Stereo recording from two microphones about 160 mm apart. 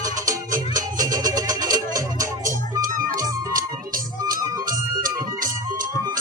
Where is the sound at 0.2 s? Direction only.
20° right (ahead or behind).